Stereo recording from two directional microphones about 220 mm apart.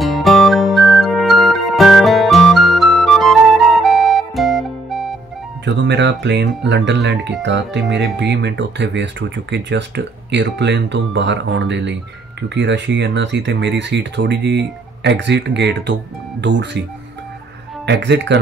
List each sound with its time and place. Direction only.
0.0 s music: centre (ahead or behind)
5.7 s speech: 55° right (ahead or behind)
17.8 s speech: 50° right (ahead or behind)